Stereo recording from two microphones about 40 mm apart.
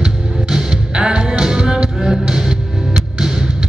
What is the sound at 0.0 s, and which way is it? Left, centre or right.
Music, centre.